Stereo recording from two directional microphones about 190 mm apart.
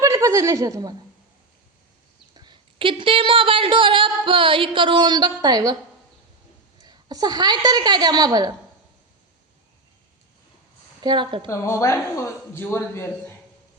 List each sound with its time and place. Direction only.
0.0 s a woman's voice: 15° right (ahead or behind)
2.3 s a woman's voice: 25° right (ahead or behind)
6.8 s a woman's voice: 20° right (ahead or behind)
11.0 s a woman's voice: 25° right (ahead or behind)
11.4 s a man's voice: 15° left (ahead or behind)